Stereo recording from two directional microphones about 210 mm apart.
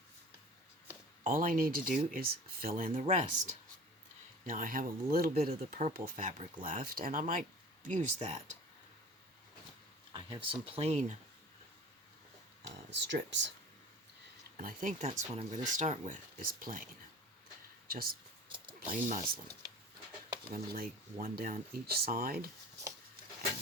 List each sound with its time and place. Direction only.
1.2 s speech: 40° right (ahead or behind)
10.1 s speech: 20° right (ahead or behind)
12.9 s speech: 55° right (ahead or behind)
14.5 s speech: 40° right (ahead or behind)
17.8 s speech: 45° right (ahead or behind)
18.4 s a sound: 25° right (ahead or behind)
18.9 s speech: 40° right (ahead or behind)
20.5 s speech: 45° right (ahead or behind)